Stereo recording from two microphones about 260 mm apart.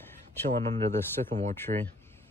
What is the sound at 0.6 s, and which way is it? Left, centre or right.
Speech, right.